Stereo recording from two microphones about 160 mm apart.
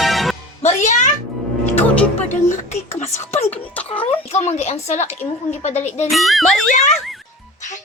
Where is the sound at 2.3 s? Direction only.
45° left (ahead or behind).